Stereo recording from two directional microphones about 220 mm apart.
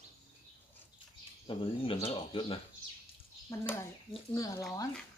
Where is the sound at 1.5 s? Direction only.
25° left (ahead or behind).